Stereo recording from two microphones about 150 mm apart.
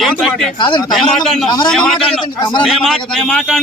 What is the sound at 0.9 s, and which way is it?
A man's voice, centre (ahead or behind).